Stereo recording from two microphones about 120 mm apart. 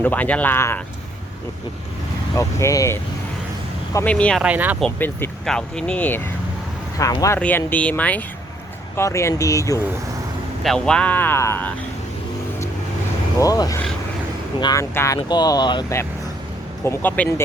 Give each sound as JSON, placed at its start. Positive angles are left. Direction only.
{"t": 0.0, "sound": "speech", "side_deg": 15}
{"t": 2.3, "sound": "speech", "side_deg": 25}
{"t": 4.0, "sound": "speech", "side_deg": 10}
{"t": 4.4, "sound": "speech", "side_deg": -10}
{"t": 4.9, "sound": "speech", "side_deg": 15}
{"t": 7.0, "sound": "speech", "side_deg": 30}
{"t": 7.3, "sound": "speech", "side_deg": 15}
{"t": 9.0, "sound": "speech", "side_deg": 25}
{"t": 10.6, "sound": "speech", "side_deg": 5}
{"t": 13.4, "sound": "speech", "side_deg": 30}
{"t": 15.3, "sound": "speech", "side_deg": 35}
{"t": 16.8, "sound": "speech", "side_deg": 20}